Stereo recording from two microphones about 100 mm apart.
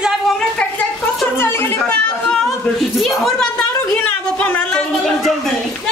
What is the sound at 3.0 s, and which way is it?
A woman's voice, 5° left (ahead or behind).